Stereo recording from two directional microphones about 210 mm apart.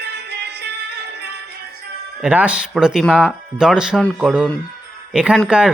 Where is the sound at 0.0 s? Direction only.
50° right (ahead or behind).